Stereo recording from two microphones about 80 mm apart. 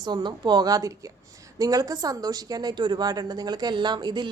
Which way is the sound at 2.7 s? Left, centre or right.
Right.